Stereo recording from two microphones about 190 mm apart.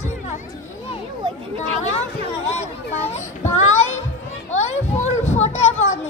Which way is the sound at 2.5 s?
35° left (ahead or behind).